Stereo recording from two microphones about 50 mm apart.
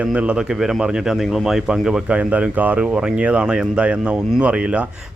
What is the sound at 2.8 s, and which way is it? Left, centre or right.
Speech, centre.